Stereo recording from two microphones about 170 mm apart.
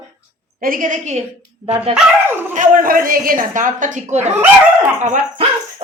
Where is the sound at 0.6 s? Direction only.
55° right (ahead or behind).